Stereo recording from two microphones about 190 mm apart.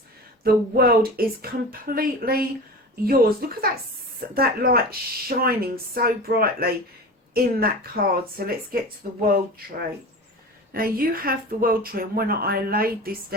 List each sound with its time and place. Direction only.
0.4 s speech: 50° right (ahead or behind)
10.7 s speech: 50° right (ahead or behind)